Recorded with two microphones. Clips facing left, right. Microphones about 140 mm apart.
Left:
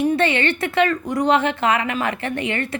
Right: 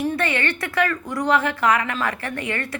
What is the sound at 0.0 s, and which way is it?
A woman's voice, 20° left (ahead or behind).